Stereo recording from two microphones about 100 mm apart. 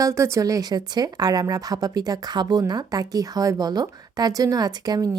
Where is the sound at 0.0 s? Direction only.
30° right (ahead or behind).